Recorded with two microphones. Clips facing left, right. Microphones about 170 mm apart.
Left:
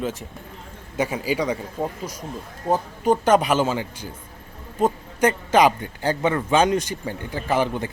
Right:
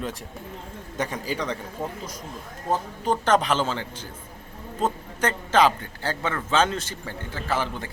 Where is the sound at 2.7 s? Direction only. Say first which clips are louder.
Left 5 dB; 10° left (ahead or behind).